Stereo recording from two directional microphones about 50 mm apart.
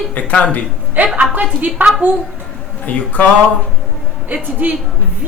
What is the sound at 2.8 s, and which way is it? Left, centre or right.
Speech, left.